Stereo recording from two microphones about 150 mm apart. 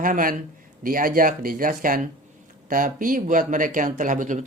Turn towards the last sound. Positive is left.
turn(degrees=-60)  # may be behind; listen again after turning